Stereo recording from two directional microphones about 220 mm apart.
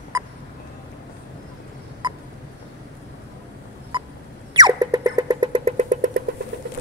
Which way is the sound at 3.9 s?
20° right (ahead or behind).